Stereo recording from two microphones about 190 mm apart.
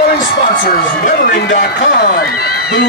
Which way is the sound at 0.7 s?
50° left (ahead or behind).